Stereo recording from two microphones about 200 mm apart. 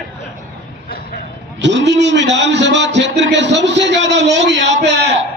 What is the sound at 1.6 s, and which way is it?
A man's voice, 60° right (ahead or behind).